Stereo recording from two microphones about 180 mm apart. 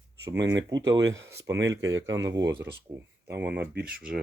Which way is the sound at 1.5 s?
85° right.